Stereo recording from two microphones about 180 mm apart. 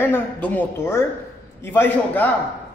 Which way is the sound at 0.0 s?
10° left (ahead or behind).